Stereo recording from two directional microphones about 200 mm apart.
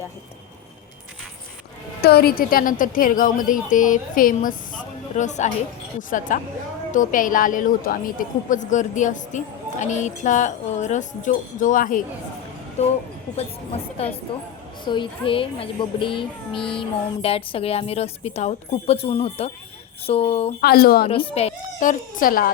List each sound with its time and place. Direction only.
2.0 s a woman's voice: 50° left (ahead or behind); by 12.9 s 35° left (ahead or behind)
14.8 s a woman's voice: 25° left (ahead or behind)
20.6 s a woman's voice: 50° left (ahead or behind)
21.1 s a woman's voice: 25° left (ahead or behind); by 22.4 s 45° left (ahead or behind)